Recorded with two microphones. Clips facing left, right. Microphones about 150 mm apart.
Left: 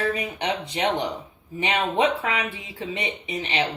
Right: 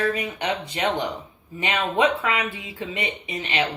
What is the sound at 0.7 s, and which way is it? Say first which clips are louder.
Speech: left 1 dB; 25° left (ahead or behind).